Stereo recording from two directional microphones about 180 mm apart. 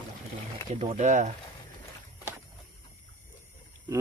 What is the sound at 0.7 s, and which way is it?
Speech, 30° right (ahead or behind).